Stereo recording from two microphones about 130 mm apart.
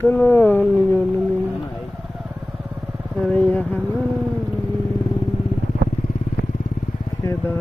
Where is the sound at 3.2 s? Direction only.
10° left (ahead or behind).